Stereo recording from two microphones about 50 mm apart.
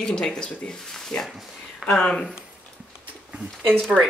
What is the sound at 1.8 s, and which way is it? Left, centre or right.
Speech, centre.